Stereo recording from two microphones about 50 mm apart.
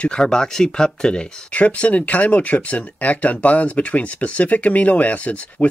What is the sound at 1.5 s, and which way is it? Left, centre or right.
Speech, left.